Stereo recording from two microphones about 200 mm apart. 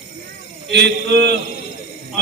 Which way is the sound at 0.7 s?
60° right (ahead or behind).